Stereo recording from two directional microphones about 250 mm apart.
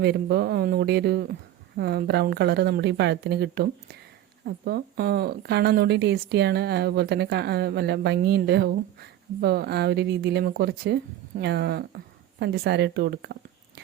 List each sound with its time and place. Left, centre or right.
0.0 s a woman's voice: right